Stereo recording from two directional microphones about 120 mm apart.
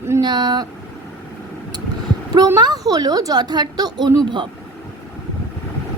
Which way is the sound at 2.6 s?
35° right (ahead or behind).